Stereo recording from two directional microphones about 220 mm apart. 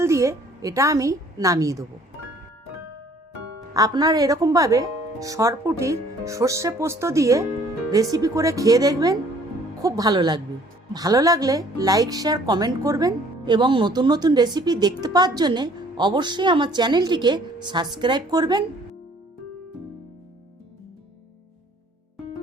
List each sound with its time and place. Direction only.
0.0 s a woman's voice: 15° right (ahead or behind)
3.8 s a woman's voice: 15° right (ahead or behind)